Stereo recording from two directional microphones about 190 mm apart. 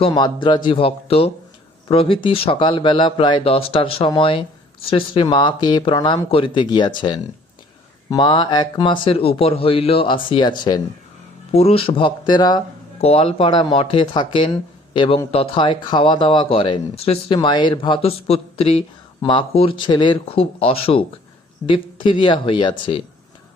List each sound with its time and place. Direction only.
0.0 s speech: 25° left (ahead or behind)